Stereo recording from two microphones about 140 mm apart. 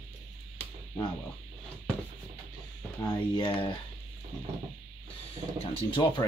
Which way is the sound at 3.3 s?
35° left (ahead or behind).